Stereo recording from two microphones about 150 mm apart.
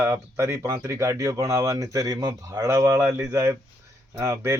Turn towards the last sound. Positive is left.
turn(degrees=-20)  # may be behind; listen again after turning